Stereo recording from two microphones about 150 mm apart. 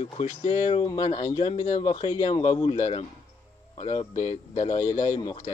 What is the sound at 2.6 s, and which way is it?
Speech, 50° left (ahead or behind).